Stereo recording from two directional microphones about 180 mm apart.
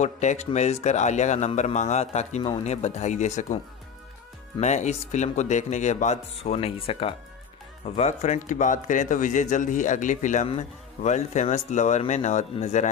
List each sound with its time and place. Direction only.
0.0 s speech: 40° left (ahead or behind)
4.6 s speech: 40° left (ahead or behind)